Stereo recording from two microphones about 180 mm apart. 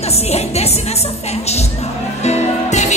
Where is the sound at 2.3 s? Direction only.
40° left (ahead or behind).